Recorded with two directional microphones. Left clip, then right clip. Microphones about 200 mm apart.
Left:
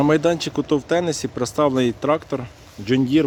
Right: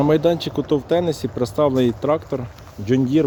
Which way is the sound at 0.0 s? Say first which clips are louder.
Right 1 dB; 5° left (ahead or behind).